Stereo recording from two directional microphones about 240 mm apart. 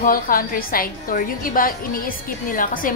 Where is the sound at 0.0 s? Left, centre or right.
Left.